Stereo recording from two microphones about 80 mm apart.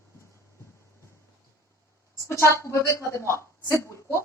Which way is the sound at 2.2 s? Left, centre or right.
Left.